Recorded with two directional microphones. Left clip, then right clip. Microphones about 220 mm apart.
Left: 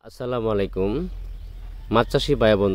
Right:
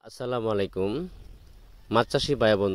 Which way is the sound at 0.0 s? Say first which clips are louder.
Left 4 dB; 40° right (ahead or behind).